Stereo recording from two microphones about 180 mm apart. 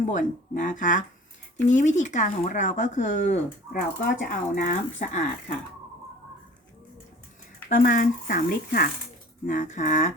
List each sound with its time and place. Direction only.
0.0 s speech: 45° left (ahead or behind)
7.8 s speech: 45° left (ahead or behind)